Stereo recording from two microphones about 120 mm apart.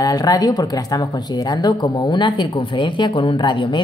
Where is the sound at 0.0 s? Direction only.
30° left (ahead or behind).